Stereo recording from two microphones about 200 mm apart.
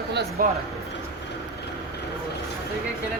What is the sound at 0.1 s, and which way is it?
Speech, 55° right (ahead or behind).